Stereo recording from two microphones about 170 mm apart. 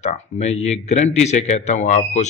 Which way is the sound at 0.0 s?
40° left (ahead or behind).